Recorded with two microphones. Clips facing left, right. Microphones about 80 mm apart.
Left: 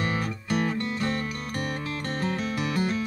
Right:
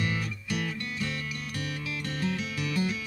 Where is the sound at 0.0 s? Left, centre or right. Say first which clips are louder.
Left 4 dB; left.